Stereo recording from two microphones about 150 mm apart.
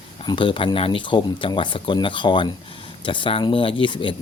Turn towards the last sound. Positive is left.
turn(degrees=35)  # may be behind; listen again after turning